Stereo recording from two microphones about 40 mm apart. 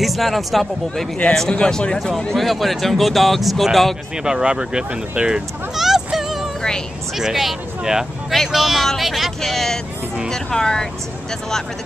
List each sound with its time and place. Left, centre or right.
0.0 s speech: centre
1.5 s speech: left
2.3 s speech: centre
4.2 s speech: centre
5.8 s music: centre
7.2 s speech: centre